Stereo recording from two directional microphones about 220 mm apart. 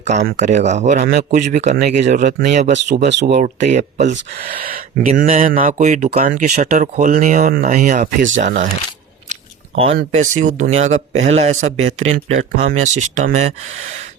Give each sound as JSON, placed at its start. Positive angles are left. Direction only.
{"t": 0.3, "sound": "speech", "side_deg": -35}
{"t": 3.1, "sound": "speech", "side_deg": -50}
{"t": 3.4, "sound": "speech", "side_deg": -35}
{"t": 9.3, "sound": "a sound", "side_deg": -25}
{"t": 10.0, "sound": "speech", "side_deg": -35}